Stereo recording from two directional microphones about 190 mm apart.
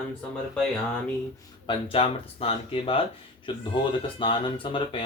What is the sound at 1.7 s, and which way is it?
Speech, 30° left (ahead or behind).